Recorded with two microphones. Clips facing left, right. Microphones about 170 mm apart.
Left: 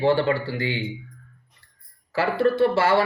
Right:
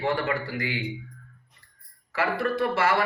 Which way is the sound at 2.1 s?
30° left (ahead or behind).